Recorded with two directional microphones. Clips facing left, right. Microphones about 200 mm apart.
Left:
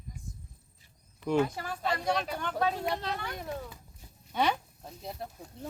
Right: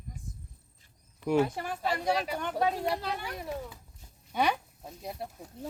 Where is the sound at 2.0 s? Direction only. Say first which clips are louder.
Right 1 dB; 10° right (ahead or behind).